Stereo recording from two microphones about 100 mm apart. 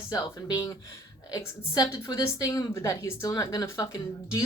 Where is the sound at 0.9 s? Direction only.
45° left (ahead or behind).